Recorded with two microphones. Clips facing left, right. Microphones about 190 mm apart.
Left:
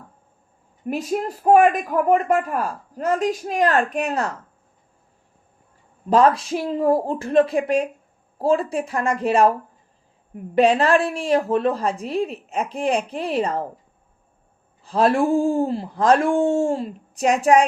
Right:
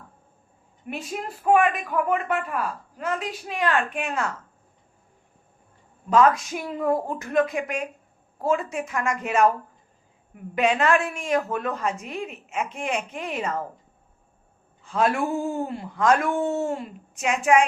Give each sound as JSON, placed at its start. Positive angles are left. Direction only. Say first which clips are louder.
{"t": 0.9, "sound": "a man's voice", "louder": "left 8 dB", "side_deg": 40}
{"t": 6.1, "sound": "a man's voice", "louder": "left 3 dB", "side_deg": 35}
{"t": 14.8, "sound": "a man's voice", "louder": "left 5 dB", "side_deg": 35}